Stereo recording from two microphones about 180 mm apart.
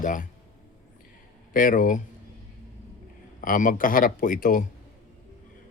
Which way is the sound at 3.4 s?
50° left (ahead or behind).